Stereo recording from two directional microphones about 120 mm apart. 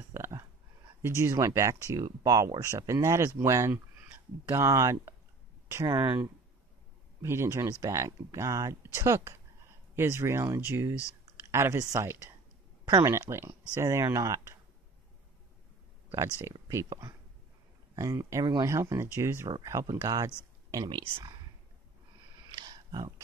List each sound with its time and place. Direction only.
0.1 s a sound: 25° right (ahead or behind)
1.0 s speech: 20° right (ahead or behind)
7.2 s speech: 25° right (ahead or behind)
16.6 s speech: 30° right (ahead or behind)
21.0 s speech: 45° right (ahead or behind)
22.5 s a sound: 35° right (ahead or behind)